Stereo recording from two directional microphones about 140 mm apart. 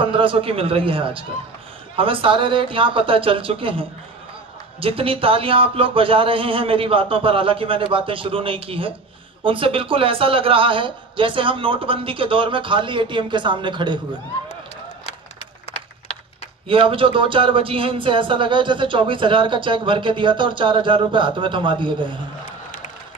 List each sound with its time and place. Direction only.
0.0 s speech: 40° right (ahead or behind)
16.6 s speech: 40° right (ahead or behind)